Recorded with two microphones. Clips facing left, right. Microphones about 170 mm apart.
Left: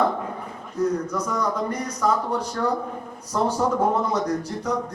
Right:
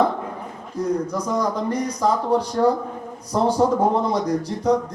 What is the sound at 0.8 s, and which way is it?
Speech, 30° right (ahead or behind).